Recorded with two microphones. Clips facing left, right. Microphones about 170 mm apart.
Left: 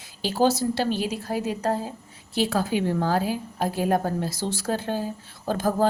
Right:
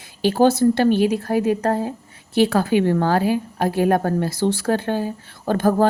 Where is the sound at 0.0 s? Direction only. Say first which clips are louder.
Right 6 dB; 60° right (ahead or behind).